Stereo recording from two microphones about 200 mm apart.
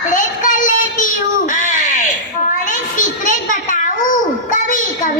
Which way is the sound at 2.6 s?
40° left (ahead or behind).